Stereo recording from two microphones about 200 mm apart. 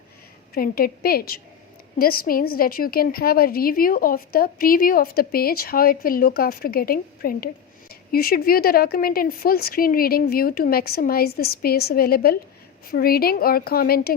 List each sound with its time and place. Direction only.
0.5 s a woman's voice: 50° left (ahead or behind)